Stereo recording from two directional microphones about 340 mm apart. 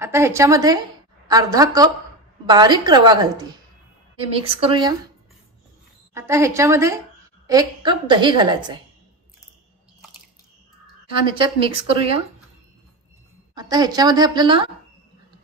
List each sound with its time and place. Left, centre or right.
0.0 s a woman's voice: centre
6.1 s a woman's voice: centre
11.2 s a woman's voice: centre
13.6 s a woman's voice: centre